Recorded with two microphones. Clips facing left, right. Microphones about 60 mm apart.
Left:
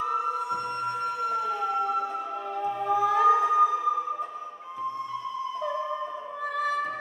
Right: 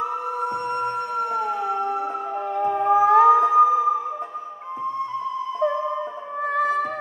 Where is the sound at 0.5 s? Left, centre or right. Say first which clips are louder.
Right 5 dB; right.